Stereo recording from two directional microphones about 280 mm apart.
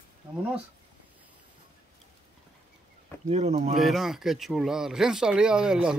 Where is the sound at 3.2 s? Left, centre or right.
Right.